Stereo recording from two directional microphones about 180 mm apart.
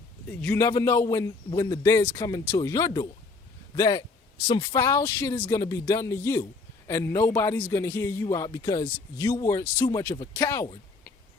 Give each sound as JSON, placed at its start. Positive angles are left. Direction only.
{"t": 0.3, "sound": "speech", "side_deg": 10}